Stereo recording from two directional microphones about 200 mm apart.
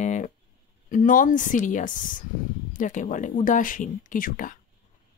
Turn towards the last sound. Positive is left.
turn(degrees=45)  # may be behind; listen again after turning